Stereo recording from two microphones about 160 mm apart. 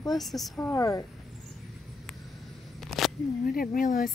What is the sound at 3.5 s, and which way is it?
Speech, 60° left (ahead or behind).